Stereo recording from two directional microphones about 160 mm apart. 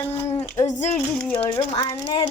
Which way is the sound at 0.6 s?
25° left (ahead or behind).